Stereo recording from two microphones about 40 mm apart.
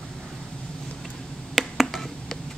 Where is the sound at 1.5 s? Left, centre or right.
Centre.